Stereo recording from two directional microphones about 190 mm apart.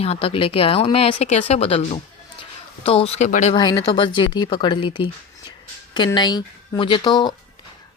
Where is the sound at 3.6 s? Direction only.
20° left (ahead or behind).